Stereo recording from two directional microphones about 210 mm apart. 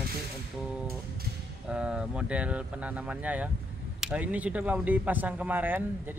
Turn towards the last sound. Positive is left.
turn(degrees=-10)  # may be behind; listen again after turning